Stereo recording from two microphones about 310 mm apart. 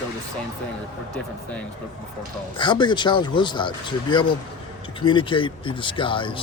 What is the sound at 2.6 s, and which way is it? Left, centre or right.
A man's voice, centre.